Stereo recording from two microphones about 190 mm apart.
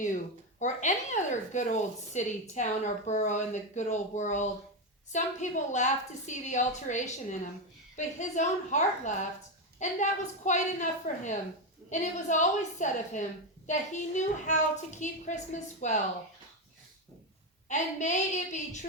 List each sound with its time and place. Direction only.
0.6 s speech: 40° left (ahead or behind)
17.7 s speech: 40° left (ahead or behind)